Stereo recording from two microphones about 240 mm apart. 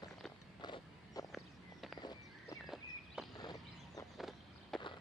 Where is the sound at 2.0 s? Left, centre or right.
Centre.